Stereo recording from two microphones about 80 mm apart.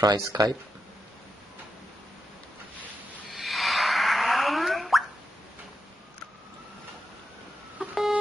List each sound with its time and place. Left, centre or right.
0.2 s speech: right
3.3 s plop: centre
7.8 s telephone dialing: centre